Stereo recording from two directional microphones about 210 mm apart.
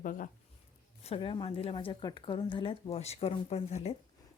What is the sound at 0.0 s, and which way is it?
Speech, 40° left (ahead or behind).